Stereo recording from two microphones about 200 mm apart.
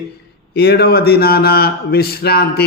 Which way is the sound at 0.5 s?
55° left (ahead or behind).